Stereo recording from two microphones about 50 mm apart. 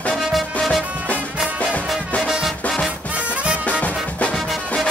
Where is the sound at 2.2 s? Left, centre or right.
Centre.